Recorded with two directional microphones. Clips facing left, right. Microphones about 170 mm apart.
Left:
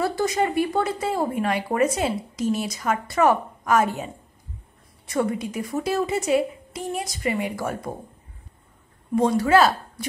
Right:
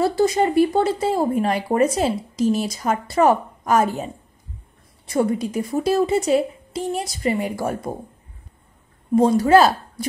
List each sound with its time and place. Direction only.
0.0 s speech: 30° right (ahead or behind)
9.1 s speech: 35° right (ahead or behind)